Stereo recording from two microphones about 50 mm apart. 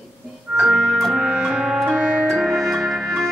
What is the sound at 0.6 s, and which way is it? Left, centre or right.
Organ, centre.